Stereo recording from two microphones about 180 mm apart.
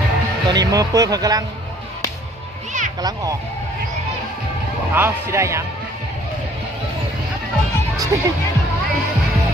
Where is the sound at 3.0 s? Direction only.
20° right (ahead or behind).